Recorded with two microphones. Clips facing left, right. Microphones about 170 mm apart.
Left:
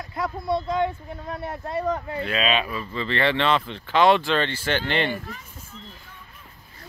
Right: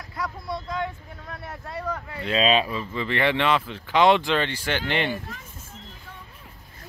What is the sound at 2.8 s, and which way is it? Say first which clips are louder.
Speech: even; 15° right (ahead or behind).